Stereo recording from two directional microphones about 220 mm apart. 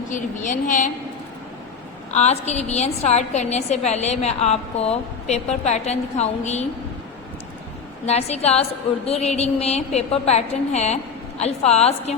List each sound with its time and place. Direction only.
0.1 s a woman's voice: 35° left (ahead or behind)
2.0 s a woman's voice: 30° left (ahead or behind)
8.0 s a woman's voice: 30° left (ahead or behind)